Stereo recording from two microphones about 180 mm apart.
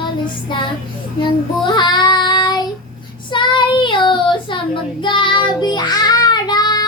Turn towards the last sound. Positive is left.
turn(degrees=25)  # may be behind; listen again after turning